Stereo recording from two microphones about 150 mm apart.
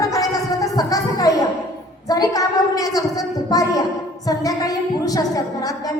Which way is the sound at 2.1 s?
25° left (ahead or behind).